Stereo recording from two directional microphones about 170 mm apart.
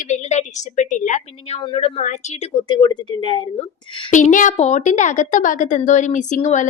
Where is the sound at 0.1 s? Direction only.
45° left (ahead or behind).